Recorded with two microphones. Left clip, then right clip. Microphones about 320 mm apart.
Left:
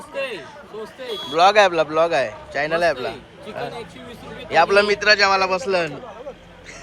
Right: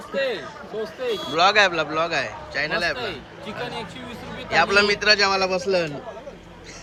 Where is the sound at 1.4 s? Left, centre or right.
Centre.